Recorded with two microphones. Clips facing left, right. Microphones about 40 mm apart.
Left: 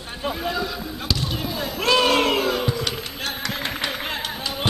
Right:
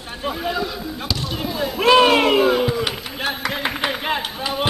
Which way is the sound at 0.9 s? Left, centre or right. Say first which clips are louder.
Right 1 dB; centre.